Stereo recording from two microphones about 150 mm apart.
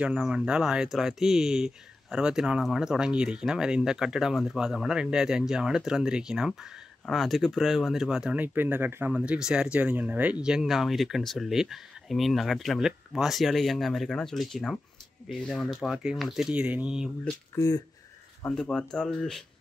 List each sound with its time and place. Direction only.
0.0 s speech: 5° right (ahead or behind)
17.6 s speech: 25° left (ahead or behind)
18.5 s speech: 5° left (ahead or behind)